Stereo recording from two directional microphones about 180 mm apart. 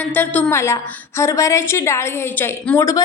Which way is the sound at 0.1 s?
10° left (ahead or behind).